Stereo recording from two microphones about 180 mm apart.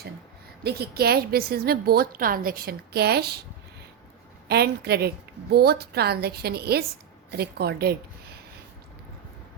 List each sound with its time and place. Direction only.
0.6 s a woman's voice: 60° right (ahead or behind)
4.4 s a woman's voice: 65° right (ahead or behind)